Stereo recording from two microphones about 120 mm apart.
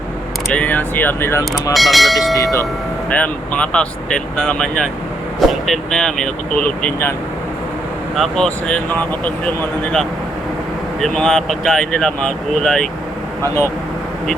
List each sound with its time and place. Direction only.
0.5 s speech: 15° left (ahead or behind)
1.7 s speech: centre (ahead or behind)
2.3 s speech: 25° left (ahead or behind)
3.1 s speech: 10° left (ahead or behind)
8.1 s speech: centre (ahead or behind)